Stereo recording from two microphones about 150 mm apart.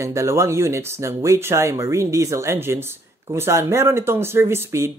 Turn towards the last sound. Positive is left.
turn(degrees=-15)  # may be behind; listen again after turning